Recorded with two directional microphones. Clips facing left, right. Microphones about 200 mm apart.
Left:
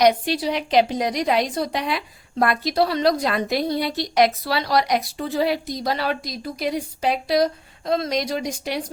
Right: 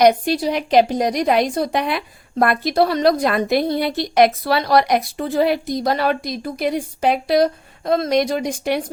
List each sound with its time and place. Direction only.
0.0 s a woman's voice: 50° right (ahead or behind)